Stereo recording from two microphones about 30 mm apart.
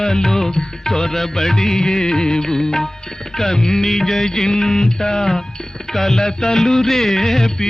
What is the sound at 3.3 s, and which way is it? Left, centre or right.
Music, centre.